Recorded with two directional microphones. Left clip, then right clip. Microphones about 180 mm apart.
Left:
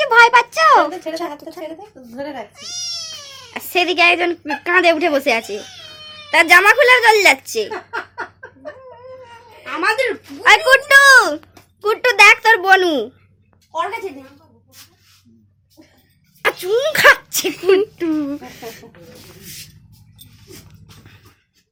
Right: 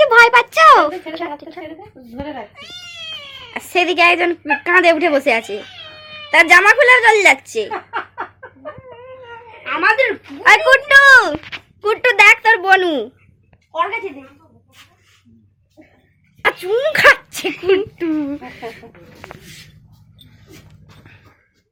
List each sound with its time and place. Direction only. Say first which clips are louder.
0.0 s a sound: right 1 dB; 15° left (ahead or behind)
1.0 s a woman's voice: left 1 dB; 20° left (ahead or behind)
1.4 s a woman's voice: even; 10° right (ahead or behind)
2.1 s speech: even; 5° left (ahead or behind)
9.6 s speech: right 4 dB; 45° left (ahead or behind)
10.7 s speech: right 1 dB; 15° left (ahead or behind)
16.4 s speech: right 1 dB; 5° left (ahead or behind)
17.5 s a woman's voice: left 1 dB; 90° left
17.9 s speech: even; 5° left (ahead or behind)